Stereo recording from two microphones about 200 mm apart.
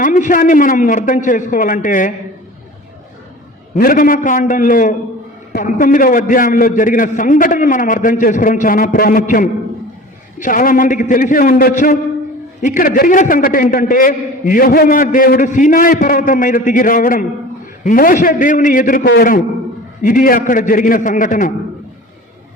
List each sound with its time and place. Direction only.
0.0 s a man's voice: 40° left (ahead or behind)
3.8 s a man's voice: 45° left (ahead or behind)